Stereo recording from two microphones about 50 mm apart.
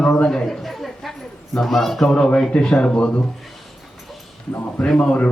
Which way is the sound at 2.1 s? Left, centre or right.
Centre.